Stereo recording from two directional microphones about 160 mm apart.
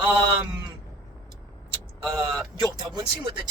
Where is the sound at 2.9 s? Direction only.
25° right (ahead or behind).